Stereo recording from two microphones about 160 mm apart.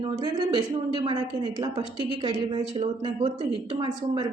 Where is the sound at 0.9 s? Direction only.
30° right (ahead or behind).